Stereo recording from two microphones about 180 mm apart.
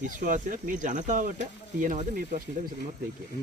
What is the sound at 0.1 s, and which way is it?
Speech, 45° right (ahead or behind).